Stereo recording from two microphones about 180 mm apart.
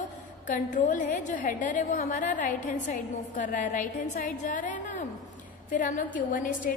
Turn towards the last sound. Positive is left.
turn(degrees=50)  # may be behind; listen again after turning